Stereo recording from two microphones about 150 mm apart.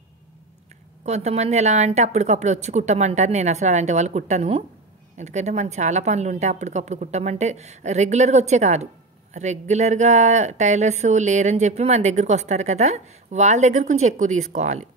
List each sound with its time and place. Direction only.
1.0 s speech: 50° right (ahead or behind)